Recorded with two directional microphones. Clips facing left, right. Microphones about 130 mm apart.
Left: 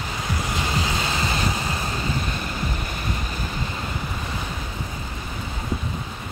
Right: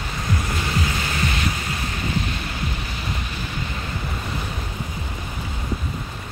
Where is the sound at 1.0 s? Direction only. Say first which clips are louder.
Even; 30° left (ahead or behind).